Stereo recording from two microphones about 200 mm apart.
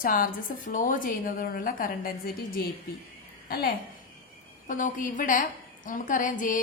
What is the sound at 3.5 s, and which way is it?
A child's voice, 50° left (ahead or behind).